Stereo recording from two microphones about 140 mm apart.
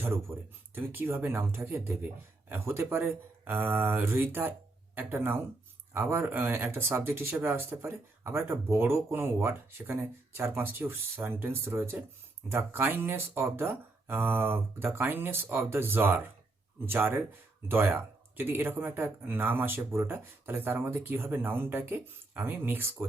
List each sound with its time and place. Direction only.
0.0 s speech: 15° right (ahead or behind)